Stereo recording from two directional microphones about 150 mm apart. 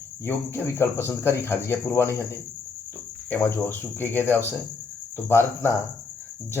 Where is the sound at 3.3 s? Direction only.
15° left (ahead or behind).